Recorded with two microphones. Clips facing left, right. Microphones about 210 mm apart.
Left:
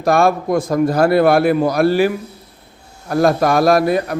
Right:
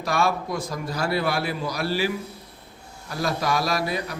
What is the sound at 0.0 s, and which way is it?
A man's voice, 50° left (ahead or behind).